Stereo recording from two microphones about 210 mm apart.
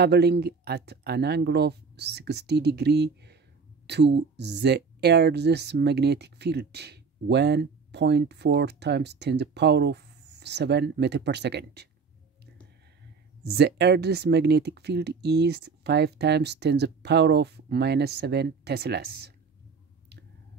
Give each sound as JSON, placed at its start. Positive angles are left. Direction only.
{"t": 0.0, "sound": "speech", "side_deg": -50}
{"t": 13.4, "sound": "speech", "side_deg": -50}